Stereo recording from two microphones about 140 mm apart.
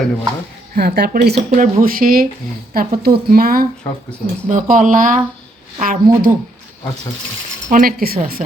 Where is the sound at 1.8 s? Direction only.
90° right.